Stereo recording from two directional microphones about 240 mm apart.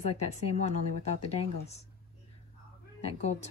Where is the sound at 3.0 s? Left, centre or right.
Left.